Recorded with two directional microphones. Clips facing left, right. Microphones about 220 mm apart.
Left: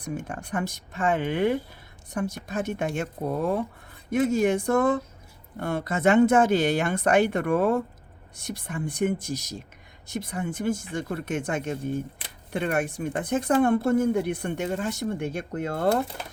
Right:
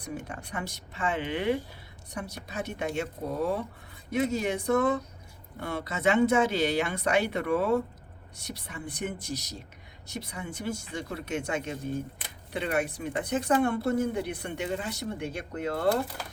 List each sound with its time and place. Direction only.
0.0 s speech: 50° left (ahead or behind)